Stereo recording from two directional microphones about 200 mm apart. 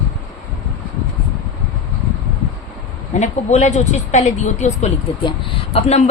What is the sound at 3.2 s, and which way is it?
Speech, 35° left (ahead or behind).